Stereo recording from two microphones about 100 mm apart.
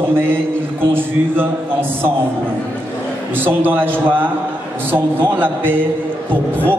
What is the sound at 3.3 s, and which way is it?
A man's voice, 20° right (ahead or behind).